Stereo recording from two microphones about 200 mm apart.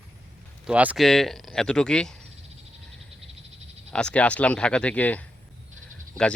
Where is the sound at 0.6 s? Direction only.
5° right (ahead or behind).